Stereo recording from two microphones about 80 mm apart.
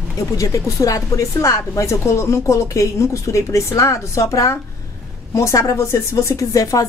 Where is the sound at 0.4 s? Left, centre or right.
Left.